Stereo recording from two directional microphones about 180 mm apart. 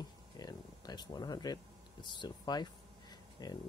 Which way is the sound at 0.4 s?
20° left (ahead or behind).